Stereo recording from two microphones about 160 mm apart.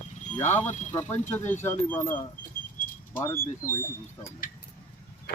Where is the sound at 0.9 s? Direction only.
15° left (ahead or behind).